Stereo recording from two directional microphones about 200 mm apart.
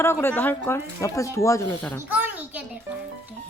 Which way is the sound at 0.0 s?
10° left (ahead or behind).